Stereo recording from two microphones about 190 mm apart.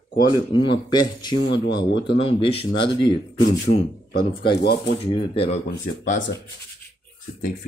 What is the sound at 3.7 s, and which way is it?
Speech, 65° left (ahead or behind).